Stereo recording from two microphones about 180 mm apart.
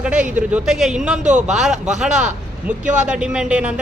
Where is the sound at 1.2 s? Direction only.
40° right (ahead or behind).